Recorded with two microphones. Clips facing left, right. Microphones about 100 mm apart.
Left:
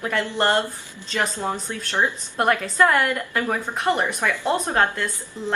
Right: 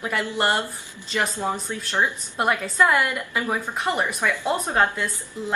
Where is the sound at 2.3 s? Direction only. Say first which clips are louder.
Left 2 dB; 5° right (ahead or behind).